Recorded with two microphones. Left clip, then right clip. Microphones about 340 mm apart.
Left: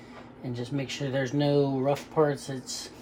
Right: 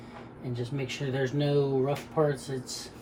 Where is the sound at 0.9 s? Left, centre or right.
Left.